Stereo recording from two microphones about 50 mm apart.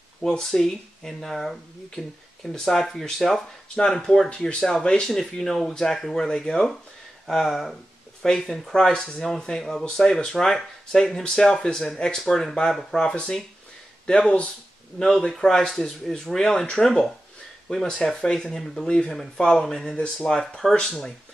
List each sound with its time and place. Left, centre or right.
0.2 s speech: centre
14.0 s speech: centre